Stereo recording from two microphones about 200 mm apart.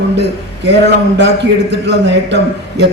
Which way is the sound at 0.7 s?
60° right (ahead or behind).